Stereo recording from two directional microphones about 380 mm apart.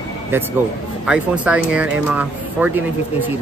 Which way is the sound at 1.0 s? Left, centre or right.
Centre.